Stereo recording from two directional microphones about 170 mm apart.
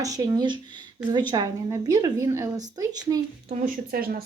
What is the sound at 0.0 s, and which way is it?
A woman's voice, 20° right (ahead or behind).